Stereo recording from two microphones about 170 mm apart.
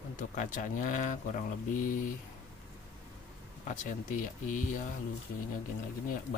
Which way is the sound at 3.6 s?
50° left (ahead or behind).